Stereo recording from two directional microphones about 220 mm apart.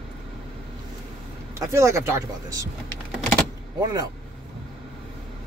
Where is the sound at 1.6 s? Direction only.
15° right (ahead or behind).